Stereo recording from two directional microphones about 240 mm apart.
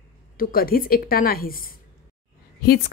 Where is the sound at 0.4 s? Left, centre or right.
Left.